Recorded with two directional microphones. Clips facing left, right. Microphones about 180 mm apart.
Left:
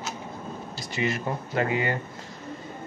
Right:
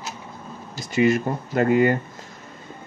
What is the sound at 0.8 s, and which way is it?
Speech, 45° right (ahead or behind).